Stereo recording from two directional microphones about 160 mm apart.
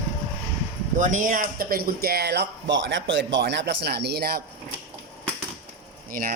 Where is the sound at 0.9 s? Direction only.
50° right (ahead or behind); by 4.4 s 75° right (ahead or behind).